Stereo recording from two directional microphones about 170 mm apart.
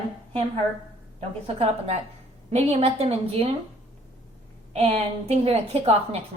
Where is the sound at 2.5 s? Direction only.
40° right (ahead or behind).